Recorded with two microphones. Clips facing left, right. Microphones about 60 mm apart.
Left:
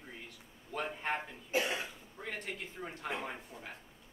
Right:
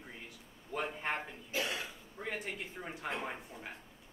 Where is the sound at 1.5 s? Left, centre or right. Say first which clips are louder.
Left 4 dB; left.